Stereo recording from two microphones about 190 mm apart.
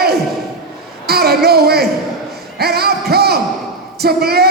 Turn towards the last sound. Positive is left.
turn(degrees=-55)  # may be behind; listen again after turning